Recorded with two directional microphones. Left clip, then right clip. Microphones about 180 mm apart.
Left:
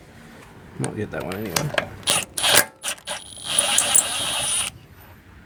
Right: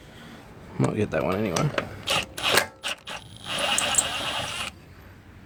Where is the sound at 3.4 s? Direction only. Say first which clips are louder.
Left 3 dB; 15° left (ahead or behind).